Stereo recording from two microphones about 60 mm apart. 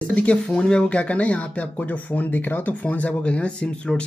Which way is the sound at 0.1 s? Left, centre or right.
Centre.